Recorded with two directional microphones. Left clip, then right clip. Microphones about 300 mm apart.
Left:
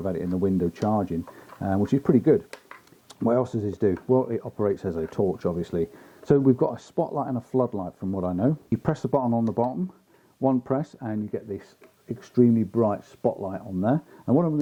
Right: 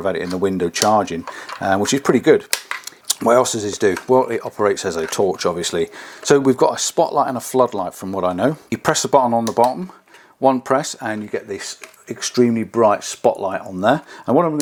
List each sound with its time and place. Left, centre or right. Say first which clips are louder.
0.0 s speech: right 7 dB; centre
7.9 s speech: right 8 dB; right
8.2 s speech: right 9 dB; centre
9.4 s speech: right 10 dB; centre